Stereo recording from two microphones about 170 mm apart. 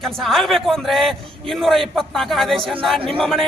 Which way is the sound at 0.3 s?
Centre (ahead or behind).